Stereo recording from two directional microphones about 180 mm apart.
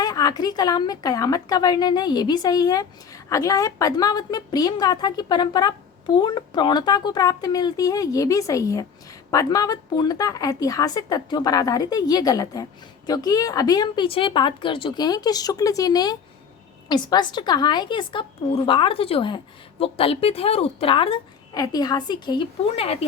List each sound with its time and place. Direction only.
0.0 s a woman's voice: 20° left (ahead or behind)